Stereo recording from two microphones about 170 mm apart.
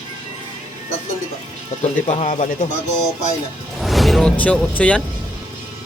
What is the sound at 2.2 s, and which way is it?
Speech, 45° left (ahead or behind).